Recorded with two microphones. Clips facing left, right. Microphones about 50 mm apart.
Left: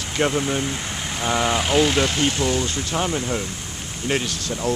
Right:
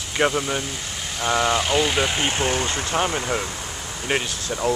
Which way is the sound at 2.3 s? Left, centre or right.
Right.